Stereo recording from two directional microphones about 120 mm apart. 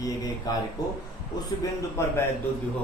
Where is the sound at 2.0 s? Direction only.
25° left (ahead or behind).